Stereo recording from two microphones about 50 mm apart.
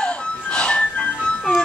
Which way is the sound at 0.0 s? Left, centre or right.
Centre.